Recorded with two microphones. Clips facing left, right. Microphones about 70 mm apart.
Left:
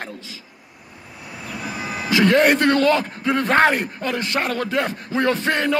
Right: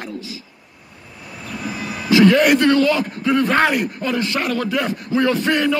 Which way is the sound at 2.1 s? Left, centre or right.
Left.